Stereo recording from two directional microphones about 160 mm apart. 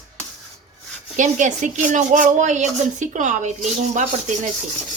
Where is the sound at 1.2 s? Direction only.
50° right (ahead or behind).